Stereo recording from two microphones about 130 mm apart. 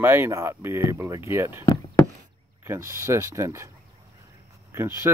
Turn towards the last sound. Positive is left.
turn(degrees=-20)  # may be behind; listen again after turning